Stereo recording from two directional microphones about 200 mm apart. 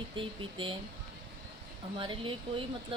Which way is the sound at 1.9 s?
25° right (ahead or behind).